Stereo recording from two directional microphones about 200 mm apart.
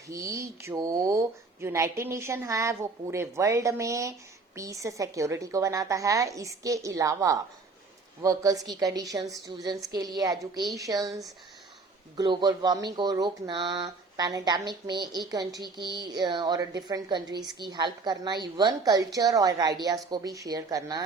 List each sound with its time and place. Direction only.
0.1 s speech: 15° right (ahead or behind)
12.1 s speech: 20° right (ahead or behind)